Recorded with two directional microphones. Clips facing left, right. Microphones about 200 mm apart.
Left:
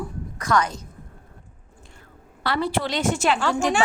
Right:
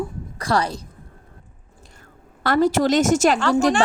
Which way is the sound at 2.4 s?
45° right (ahead or behind).